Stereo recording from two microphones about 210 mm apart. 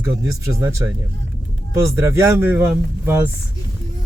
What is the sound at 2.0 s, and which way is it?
Speech, 15° right (ahead or behind).